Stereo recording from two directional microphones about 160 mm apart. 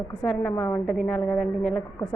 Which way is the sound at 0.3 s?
5° left (ahead or behind).